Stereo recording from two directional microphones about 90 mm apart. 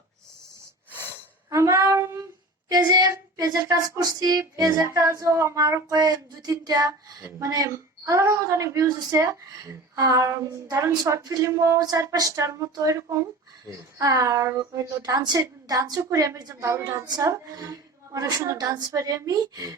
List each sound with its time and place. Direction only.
1.5 s a sound: 35° right (ahead or behind)
2.6 s speech: 45° right (ahead or behind)
15.0 s a woman's voice: 50° right (ahead or behind)